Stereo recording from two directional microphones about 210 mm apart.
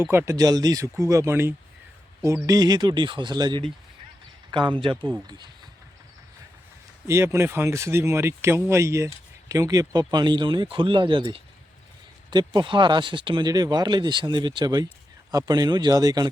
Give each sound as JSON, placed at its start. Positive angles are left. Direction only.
{"t": 0.0, "sound": "speech", "side_deg": -10}
{"t": 7.1, "sound": "speech", "side_deg": -15}